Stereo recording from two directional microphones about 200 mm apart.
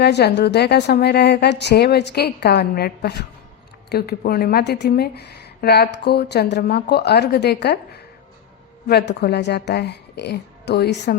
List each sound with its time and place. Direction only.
0.0 s a woman's voice: 55° left (ahead or behind)
8.9 s a woman's voice: 55° left (ahead or behind)